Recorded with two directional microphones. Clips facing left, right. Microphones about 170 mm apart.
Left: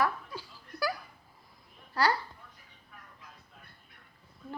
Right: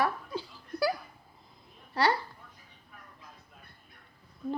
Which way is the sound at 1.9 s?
25° right (ahead or behind).